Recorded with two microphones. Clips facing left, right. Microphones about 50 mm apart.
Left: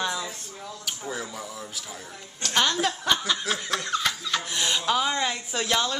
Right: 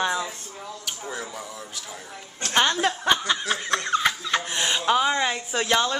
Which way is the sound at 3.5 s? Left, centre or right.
Centre.